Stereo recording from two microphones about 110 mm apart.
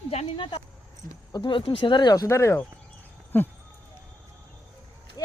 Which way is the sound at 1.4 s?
55° left (ahead or behind).